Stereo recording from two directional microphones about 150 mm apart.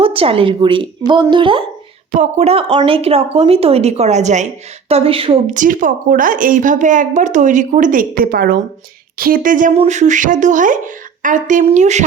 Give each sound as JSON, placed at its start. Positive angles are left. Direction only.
{"t": 0.0, "sound": "speech", "side_deg": -40}
{"t": 2.1, "sound": "speech", "side_deg": -45}
{"t": 5.5, "sound": "a woman's voice", "side_deg": -65}
{"t": 9.7, "sound": "a woman's voice", "side_deg": -50}